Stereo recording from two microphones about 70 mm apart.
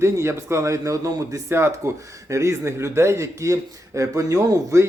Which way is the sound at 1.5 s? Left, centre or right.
Right.